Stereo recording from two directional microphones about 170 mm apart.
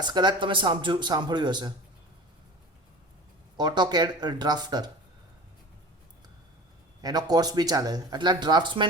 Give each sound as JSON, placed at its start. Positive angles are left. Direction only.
{"t": 0.0, "sound": "speech", "side_deg": -25}
{"t": 3.6, "sound": "speech", "side_deg": -25}
{"t": 7.0, "sound": "speech", "side_deg": -25}